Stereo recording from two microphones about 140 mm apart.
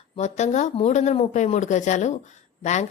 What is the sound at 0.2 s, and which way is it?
A woman's voice, 55° left (ahead or behind).